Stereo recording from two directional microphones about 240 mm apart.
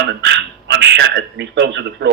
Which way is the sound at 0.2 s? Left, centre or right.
Right.